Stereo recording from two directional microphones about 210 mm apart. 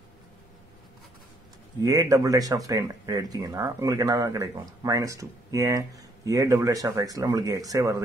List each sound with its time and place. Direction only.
1.8 s speech: 15° right (ahead or behind)